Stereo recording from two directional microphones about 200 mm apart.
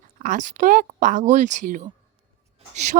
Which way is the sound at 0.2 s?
40° right (ahead or behind).